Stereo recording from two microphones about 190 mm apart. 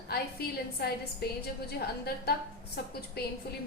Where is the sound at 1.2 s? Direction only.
55° left (ahead or behind).